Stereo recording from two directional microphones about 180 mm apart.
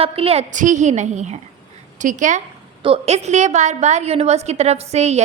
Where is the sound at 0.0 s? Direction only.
35° right (ahead or behind).